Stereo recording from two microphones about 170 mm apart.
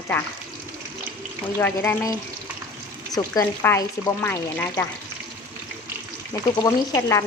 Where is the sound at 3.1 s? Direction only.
15° left (ahead or behind).